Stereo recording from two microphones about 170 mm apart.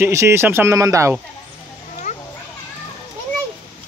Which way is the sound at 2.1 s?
45° left (ahead or behind).